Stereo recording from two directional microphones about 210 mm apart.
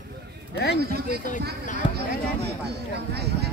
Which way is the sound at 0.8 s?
50° right (ahead or behind).